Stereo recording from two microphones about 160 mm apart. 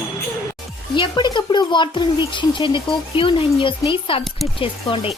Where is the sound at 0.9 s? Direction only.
30° left (ahead or behind).